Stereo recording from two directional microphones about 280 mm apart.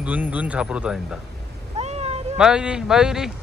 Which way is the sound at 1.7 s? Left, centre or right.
Right.